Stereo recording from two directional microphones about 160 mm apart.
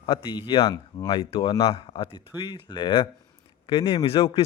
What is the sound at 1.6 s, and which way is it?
Speech, 35° left (ahead or behind).